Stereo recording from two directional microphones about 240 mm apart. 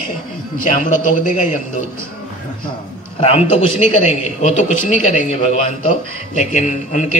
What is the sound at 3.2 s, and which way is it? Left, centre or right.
A man's voice, left.